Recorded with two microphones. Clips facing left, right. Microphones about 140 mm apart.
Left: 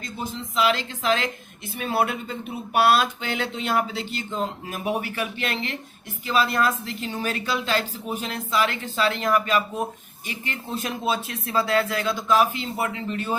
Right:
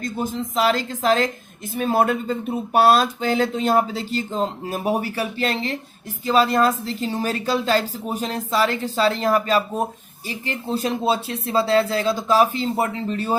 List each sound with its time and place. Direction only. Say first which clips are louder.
0.0 s a woman's voice: right 7 dB; 45° right (ahead or behind)